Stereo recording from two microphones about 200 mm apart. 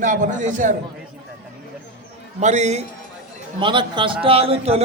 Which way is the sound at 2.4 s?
35° right (ahead or behind).